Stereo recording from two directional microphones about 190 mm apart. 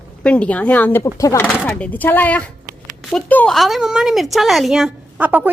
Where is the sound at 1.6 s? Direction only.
5° left (ahead or behind).